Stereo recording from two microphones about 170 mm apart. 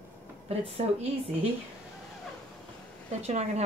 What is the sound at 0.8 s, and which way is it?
Speech, 35° right (ahead or behind).